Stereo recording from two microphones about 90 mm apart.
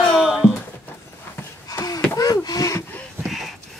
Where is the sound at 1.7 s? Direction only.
45° left (ahead or behind).